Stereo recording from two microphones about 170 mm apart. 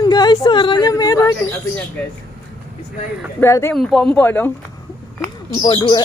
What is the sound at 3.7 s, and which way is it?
Speech, centre (ahead or behind).